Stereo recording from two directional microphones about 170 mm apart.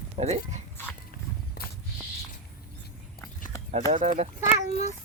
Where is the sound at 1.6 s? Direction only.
70° left (ahead or behind).